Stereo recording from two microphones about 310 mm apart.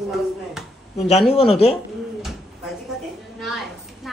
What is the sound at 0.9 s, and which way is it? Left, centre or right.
Speech, left.